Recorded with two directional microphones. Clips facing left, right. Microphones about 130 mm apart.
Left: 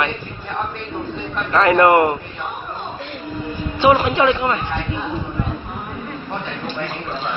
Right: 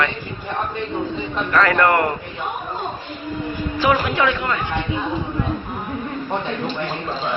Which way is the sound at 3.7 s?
25° left (ahead or behind).